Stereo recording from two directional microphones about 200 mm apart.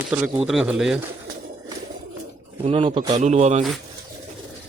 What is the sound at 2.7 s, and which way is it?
Speech, 30° right (ahead or behind).